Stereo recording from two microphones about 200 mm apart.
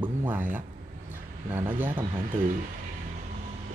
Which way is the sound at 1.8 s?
10° right (ahead or behind).